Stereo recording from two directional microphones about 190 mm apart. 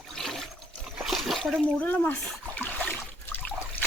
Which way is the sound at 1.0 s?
Centre (ahead or behind).